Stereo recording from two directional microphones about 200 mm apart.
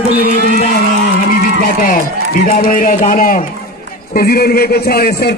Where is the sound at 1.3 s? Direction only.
45° left (ahead or behind).